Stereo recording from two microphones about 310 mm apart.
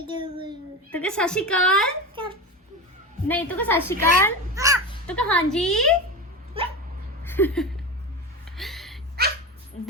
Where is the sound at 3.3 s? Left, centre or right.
Centre.